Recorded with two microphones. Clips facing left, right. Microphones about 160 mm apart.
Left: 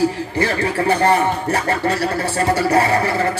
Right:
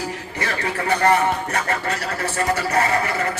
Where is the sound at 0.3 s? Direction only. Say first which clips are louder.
Left 4 dB; 30° left (ahead or behind).